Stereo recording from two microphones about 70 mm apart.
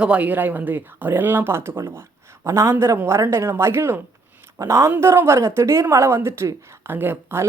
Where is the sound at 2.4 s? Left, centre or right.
Right.